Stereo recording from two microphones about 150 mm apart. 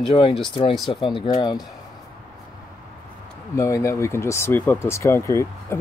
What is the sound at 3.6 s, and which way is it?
Speech, 20° left (ahead or behind).